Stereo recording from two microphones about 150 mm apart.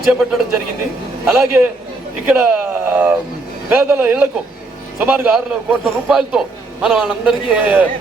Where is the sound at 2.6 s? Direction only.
15° right (ahead or behind).